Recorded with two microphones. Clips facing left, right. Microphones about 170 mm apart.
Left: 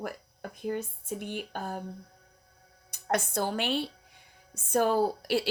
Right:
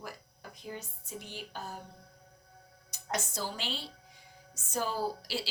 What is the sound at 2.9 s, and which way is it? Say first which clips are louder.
A woman's voice: left 7 dB; 55° left (ahead or behind).